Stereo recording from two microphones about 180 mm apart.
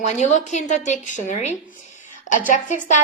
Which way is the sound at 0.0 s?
40° left (ahead or behind).